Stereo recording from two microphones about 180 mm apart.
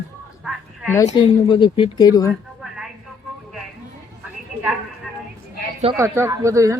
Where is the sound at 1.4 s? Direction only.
25° left (ahead or behind).